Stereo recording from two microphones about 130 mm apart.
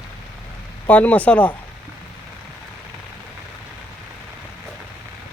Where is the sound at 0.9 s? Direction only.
10° left (ahead or behind).